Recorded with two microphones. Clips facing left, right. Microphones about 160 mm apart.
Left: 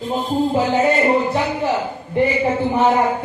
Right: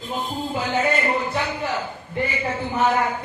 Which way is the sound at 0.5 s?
25° left (ahead or behind).